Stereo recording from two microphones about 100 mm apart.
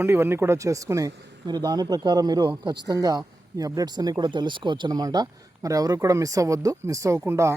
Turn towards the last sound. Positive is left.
turn(degrees=-25)  # may be behind; listen again after turning